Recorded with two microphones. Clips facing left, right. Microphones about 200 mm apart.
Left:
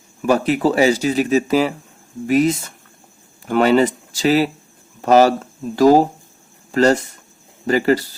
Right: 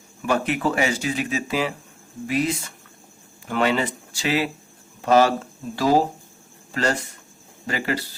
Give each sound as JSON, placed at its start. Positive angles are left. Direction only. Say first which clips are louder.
{"t": 0.3, "sound": "speech", "louder": "left 6 dB", "side_deg": 35}
{"t": 6.7, "sound": "speech", "louder": "left 9 dB", "side_deg": 40}